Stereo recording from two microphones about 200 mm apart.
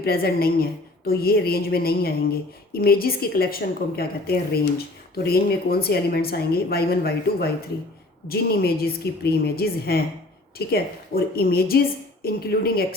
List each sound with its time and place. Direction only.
0.0 s a woman's voice: 50° left (ahead or behind)